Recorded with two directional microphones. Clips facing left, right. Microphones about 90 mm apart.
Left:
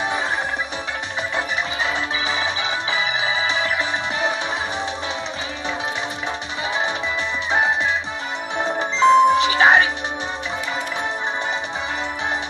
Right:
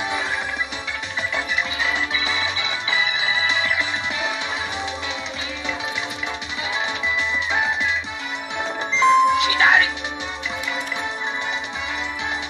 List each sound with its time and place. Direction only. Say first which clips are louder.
1.3 s music: left 1 dB; 35° left (ahead or behind)
7.5 s music: left 5 dB; 35° left (ahead or behind)